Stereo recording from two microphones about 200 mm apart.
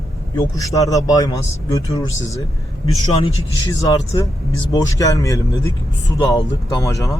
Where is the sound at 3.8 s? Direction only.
15° left (ahead or behind).